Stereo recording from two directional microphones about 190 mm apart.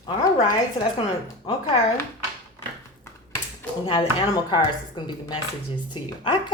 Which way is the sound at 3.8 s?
25° left (ahead or behind).